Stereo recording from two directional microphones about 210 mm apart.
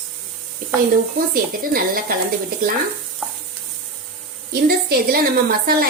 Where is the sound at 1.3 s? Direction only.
45° right (ahead or behind).